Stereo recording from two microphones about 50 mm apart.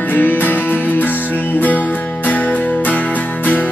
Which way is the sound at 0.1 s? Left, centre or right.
Left.